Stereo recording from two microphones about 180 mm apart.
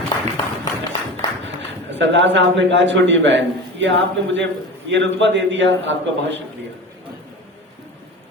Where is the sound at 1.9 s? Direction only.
90° right.